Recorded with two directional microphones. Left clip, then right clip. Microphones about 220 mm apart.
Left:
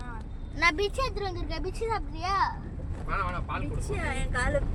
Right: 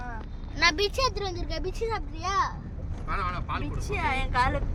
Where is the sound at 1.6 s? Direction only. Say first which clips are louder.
Left 1 dB; 10° left (ahead or behind).